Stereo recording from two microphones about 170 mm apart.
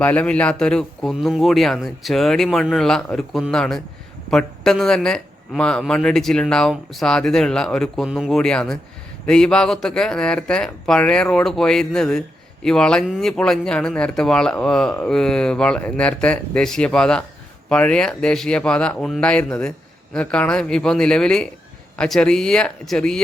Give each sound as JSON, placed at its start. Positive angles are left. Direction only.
{"t": 0.0, "sound": "speech", "side_deg": 10}